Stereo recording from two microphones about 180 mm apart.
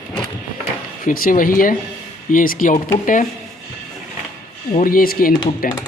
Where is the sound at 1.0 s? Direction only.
50° left (ahead or behind).